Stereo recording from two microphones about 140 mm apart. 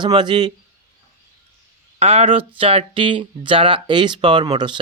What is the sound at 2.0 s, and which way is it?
Speech, 45° right (ahead or behind).